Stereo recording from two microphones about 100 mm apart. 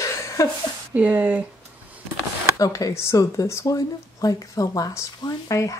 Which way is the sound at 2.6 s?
35° left (ahead or behind).